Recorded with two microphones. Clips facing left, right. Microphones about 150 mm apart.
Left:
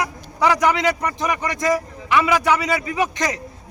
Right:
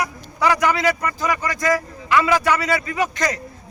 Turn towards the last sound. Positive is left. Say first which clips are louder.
# even
turn(degrees=15)  # may be behind; listen again after turning